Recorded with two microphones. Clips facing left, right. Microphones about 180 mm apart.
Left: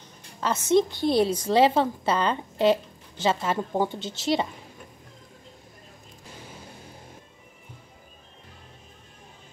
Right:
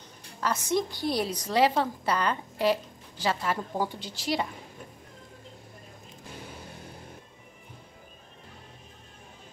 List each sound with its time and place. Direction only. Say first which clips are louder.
0.4 s a woman's voice: left 6 dB; 25° left (ahead or behind)